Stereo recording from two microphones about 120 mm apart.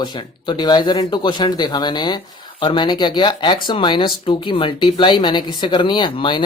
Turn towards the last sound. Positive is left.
turn(degrees=45)  # may be behind; listen again after turning